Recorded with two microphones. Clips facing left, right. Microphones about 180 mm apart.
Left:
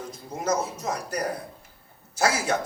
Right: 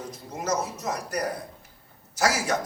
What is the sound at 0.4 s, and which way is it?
Speech, 30° left (ahead or behind).